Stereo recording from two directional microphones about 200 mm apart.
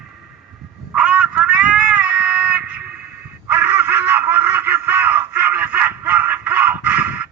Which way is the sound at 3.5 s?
10° right (ahead or behind).